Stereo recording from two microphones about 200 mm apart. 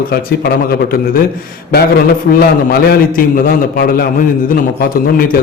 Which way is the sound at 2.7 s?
45° left (ahead or behind).